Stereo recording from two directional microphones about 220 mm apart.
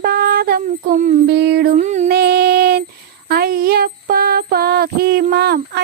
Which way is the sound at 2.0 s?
45° right (ahead or behind).